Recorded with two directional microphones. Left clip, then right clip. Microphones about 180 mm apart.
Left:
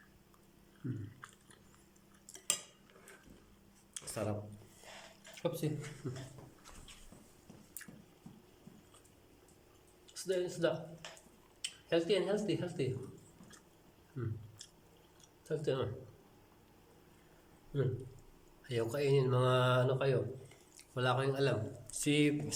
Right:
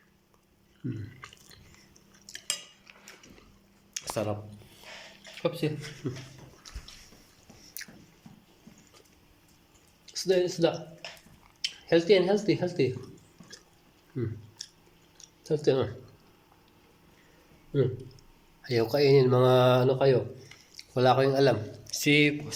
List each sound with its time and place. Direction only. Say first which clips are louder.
0.9 s chewing: right 7 dB; 15° right (ahead or behind)
3.9 s a sound: right 9 dB; 20° right (ahead or behind)
5.4 s speech: right 8 dB; 5° right (ahead or behind)
10.2 s a sound: right 11 dB; 25° right (ahead or behind)
10.5 s speech: right 8 dB; 25° right (ahead or behind)
11.9 s speech: right 10 dB; 30° right (ahead or behind)
14.2 s speech: right 11 dB; 30° right (ahead or behind)
15.4 s speech: right 10 dB; 25° right (ahead or behind)
18.6 s speech: right 11 dB; 30° right (ahead or behind)
22.0 s speech: right 9 dB; centre (ahead or behind)